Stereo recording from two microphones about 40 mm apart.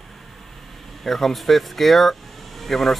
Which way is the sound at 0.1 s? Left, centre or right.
Centre.